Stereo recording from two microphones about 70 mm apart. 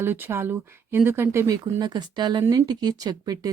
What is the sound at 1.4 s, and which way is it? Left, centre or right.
Speech, right.